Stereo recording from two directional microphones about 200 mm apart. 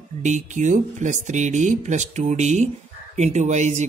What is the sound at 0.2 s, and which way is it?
Speech, 35° right (ahead or behind).